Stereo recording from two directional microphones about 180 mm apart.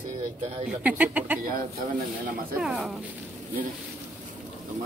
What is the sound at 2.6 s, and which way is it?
Speech, centre (ahead or behind).